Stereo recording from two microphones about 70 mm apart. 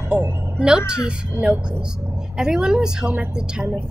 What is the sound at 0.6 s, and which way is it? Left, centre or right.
A woman's voice, centre.